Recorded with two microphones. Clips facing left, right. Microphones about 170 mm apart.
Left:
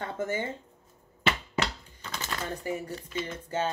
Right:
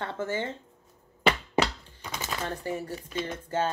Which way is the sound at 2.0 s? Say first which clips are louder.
Right 1 dB; 10° right (ahead or behind).